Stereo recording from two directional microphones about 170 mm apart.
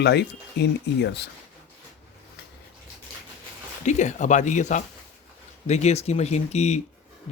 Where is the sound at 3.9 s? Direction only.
45° left (ahead or behind).